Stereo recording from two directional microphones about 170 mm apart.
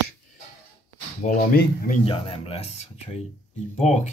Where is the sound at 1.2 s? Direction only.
55° left (ahead or behind).